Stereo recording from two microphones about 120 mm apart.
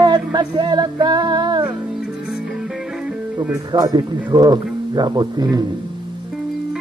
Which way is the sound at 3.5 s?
30° right (ahead or behind).